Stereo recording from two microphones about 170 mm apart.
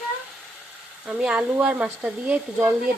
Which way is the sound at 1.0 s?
5° right (ahead or behind).